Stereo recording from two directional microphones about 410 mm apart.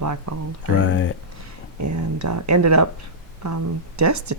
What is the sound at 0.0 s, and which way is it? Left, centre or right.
Speech, right.